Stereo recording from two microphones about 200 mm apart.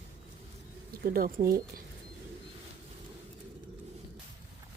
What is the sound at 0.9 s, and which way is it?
Speech, 45° right (ahead or behind).